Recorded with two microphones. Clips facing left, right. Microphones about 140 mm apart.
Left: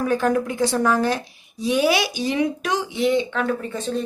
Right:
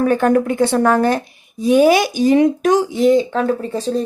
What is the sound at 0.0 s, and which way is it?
Speech, 60° right (ahead or behind).